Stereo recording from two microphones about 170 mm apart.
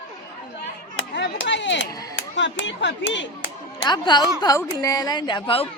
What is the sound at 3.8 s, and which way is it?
A woman's voice, 25° left (ahead or behind).